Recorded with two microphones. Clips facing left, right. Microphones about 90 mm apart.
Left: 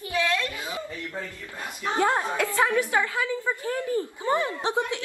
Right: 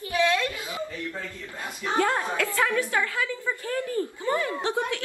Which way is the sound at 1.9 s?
20° left (ahead or behind).